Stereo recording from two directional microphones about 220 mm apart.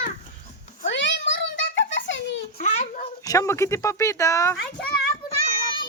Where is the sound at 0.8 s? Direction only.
55° left (ahead or behind).